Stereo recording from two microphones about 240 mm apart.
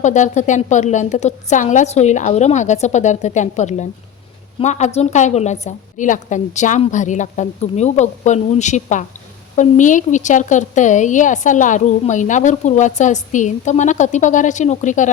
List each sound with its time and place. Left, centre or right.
0.0 s a woman's voice: left